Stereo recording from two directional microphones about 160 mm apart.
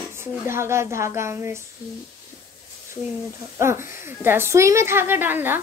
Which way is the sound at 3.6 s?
15° right (ahead or behind).